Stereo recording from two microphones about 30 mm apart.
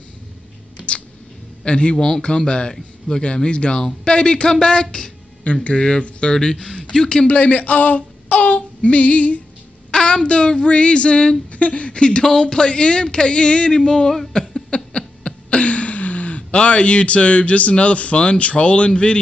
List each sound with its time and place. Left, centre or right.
0.7 s a sound: left
1.6 s a man's voice: left
2.2 s child singing: left
5.4 s speech: left
5.8 s child singing: left
6.3 s speech: centre
7.2 s speech: left
8.5 s female singing: left
9.8 s child singing: left
13.7 s a sound: left
15.5 s speech: left